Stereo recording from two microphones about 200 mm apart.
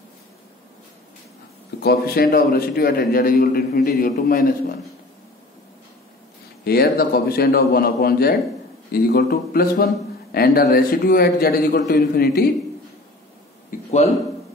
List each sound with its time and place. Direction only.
1.8 s a man's voice: 50° left (ahead or behind)
6.6 s a man's voice: 50° left (ahead or behind)
13.7 s a sound: 35° left (ahead or behind)